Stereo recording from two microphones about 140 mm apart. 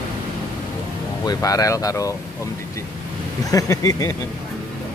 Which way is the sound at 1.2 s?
25° left (ahead or behind).